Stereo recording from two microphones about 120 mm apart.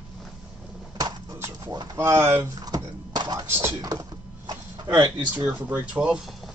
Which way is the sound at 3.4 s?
20° right (ahead or behind).